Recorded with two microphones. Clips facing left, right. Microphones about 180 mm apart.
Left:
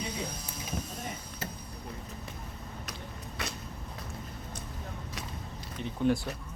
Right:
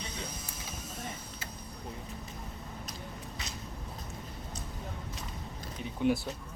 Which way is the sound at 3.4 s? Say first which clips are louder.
Left 10 dB; 60° left (ahead or behind).